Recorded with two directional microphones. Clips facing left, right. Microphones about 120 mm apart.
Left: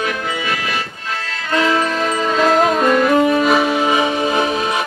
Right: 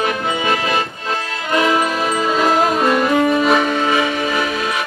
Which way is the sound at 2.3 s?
5° right (ahead or behind).